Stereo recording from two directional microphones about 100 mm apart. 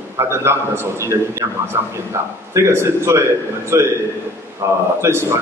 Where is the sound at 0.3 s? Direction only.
25° right (ahead or behind).